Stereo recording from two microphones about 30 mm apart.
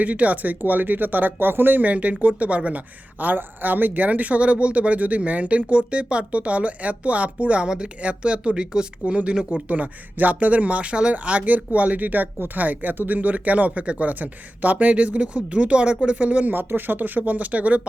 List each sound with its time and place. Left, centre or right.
0.0 s speech: right
0.6 s speech: right
1.9 s speech: right
3.2 s speech: right
8.2 s speech: right
9.6 s speech: right
10.2 s speech: right
10.5 s speech: right
11.1 s speech: right
16.1 s speech: right
16.5 s speech: right